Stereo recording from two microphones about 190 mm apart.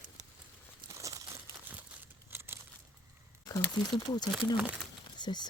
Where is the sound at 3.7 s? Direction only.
20° left (ahead or behind).